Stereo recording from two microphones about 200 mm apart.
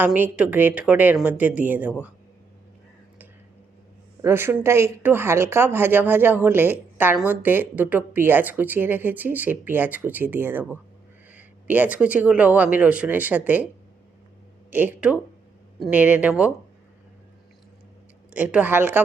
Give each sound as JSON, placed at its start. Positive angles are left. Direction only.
{"t": 0.0, "sound": "speech", "side_deg": -5}
{"t": 4.2, "sound": "speech", "side_deg": -10}
{"t": 14.7, "sound": "speech", "side_deg": -10}
{"t": 18.3, "sound": "speech", "side_deg": -10}